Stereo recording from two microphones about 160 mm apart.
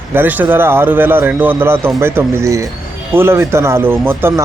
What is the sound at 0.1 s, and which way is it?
A man's voice, 10° right (ahead or behind).